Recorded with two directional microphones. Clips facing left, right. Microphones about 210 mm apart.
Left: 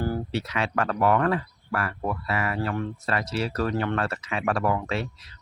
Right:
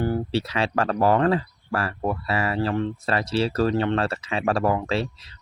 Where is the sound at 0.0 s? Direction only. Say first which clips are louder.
Right 4 dB; 25° right (ahead or behind).